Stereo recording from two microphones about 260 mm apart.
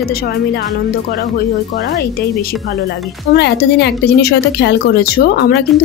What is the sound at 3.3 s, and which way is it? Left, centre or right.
Speech, left.